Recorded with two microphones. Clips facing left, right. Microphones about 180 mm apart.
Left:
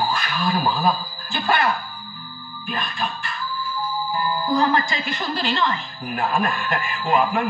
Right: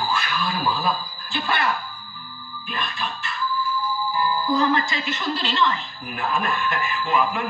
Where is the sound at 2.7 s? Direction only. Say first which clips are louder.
Left 2 dB; 45° left (ahead or behind).